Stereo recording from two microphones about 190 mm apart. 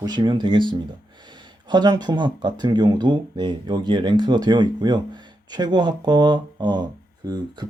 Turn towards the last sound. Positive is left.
turn(degrees=-20)  # may be behind; listen again after turning